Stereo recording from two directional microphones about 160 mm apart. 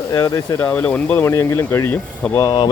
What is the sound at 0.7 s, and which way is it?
Speech, 10° left (ahead or behind).